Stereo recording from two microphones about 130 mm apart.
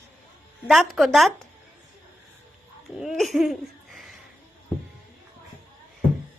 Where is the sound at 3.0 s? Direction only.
Centre (ahead or behind).